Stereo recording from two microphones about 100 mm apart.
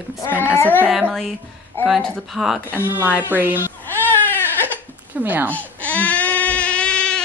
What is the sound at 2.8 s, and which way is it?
Speech, 20° right (ahead or behind).